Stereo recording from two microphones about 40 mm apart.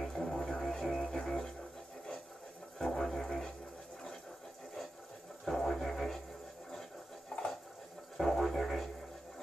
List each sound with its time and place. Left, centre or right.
0.0 s music: centre
1.2 s didgeridoo: centre
2.8 s didgeridoo: centre
5.4 s didgeridoo: centre
7.3 s water: left
8.2 s music: centre